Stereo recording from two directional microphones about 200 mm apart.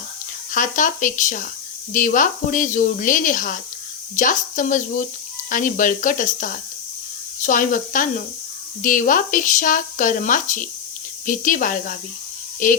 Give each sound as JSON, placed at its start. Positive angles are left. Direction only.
{"t": 0.5, "sound": "speech", "side_deg": 40}